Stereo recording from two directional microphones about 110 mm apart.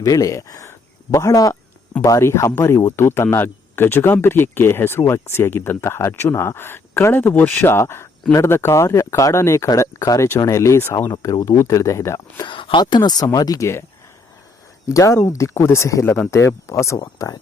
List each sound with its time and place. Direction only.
0.0 s speech: 30° left (ahead or behind)
12.5 s speech: 50° left (ahead or behind); by 13.8 s 25° left (ahead or behind)
14.8 s speech: 30° left (ahead or behind)